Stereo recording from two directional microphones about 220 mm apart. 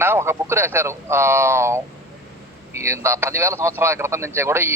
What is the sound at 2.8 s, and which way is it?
A man's voice, 10° right (ahead or behind).